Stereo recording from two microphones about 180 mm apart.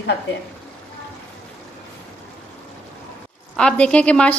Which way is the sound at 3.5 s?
5° left (ahead or behind).